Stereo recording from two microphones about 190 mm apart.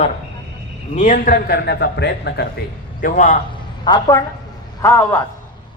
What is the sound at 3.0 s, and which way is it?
Speech, 40° left (ahead or behind).